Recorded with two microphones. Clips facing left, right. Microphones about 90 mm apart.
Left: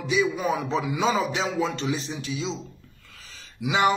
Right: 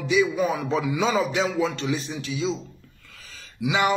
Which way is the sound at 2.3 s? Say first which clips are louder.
Right 4 dB; 30° left (ahead or behind).